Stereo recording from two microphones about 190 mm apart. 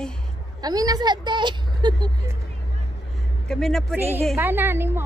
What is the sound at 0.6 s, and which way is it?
A woman's voice, 20° right (ahead or behind).